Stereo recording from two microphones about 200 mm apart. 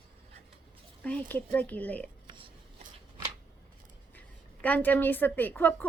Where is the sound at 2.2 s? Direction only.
25° right (ahead or behind).